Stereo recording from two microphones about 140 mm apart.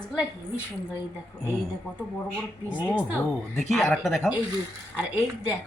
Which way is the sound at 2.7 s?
10° right (ahead or behind).